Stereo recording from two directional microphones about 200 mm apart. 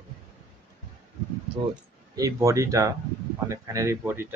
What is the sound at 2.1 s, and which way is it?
Speech, 15° right (ahead or behind).